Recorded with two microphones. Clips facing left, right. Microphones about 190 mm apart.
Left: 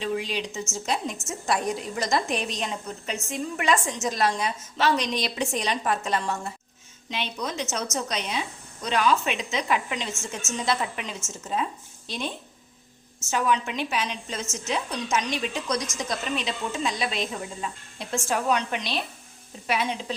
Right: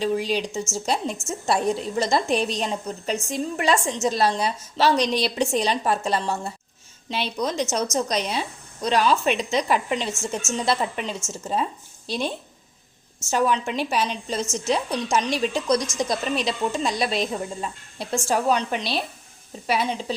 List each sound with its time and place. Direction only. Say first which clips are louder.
0.0 s a woman's voice: right 5 dB; 35° right (ahead or behind)
13.3 s a woman's voice: right 3 dB; 35° right (ahead or behind)